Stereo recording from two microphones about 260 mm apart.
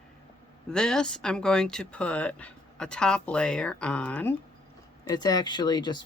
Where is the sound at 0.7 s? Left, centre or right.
Centre.